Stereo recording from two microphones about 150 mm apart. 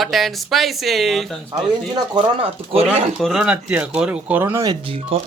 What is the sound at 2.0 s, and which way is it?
Speech, 35° right (ahead or behind).